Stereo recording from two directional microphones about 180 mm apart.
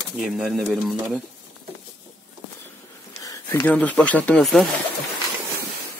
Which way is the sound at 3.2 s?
15° left (ahead or behind).